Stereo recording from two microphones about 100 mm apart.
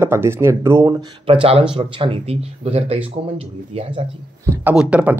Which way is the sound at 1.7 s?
60° right (ahead or behind).